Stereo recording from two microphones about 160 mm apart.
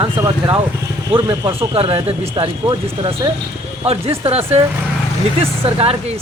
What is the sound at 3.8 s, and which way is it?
A woman's voice, 40° right (ahead or behind).